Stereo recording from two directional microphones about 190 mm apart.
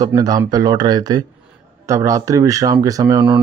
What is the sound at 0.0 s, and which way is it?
Speech, 20° right (ahead or behind).